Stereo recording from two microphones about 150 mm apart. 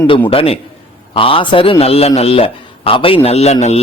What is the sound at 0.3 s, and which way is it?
A man's voice, 40° left (ahead or behind).